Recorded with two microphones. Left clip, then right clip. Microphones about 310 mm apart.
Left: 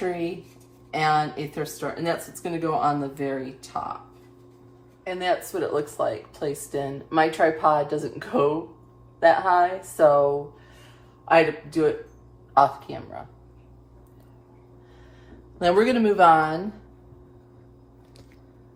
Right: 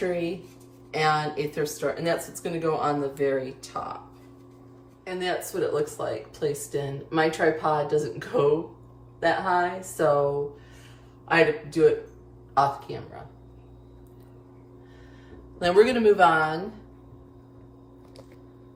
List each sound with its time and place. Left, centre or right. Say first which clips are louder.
0.9 s speech: left 2 dB; centre
5.0 s speech: left 4 dB; centre
15.5 s a woman's voice: even; centre